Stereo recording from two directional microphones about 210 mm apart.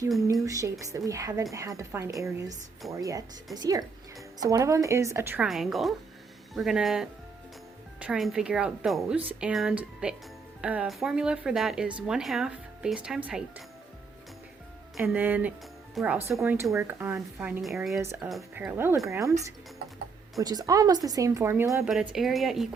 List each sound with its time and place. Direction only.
0.4 s speech: 15° right (ahead or behind)
14.9 s speech: 5° right (ahead or behind)
16.4 s speech: 10° right (ahead or behind)
20.4 s speech: 20° right (ahead or behind); by 22.7 s centre (ahead or behind)